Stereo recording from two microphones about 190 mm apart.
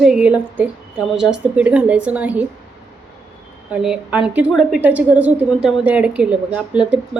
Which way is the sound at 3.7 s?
5° right (ahead or behind).